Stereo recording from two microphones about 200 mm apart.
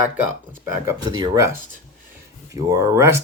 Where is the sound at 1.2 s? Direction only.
15° right (ahead or behind).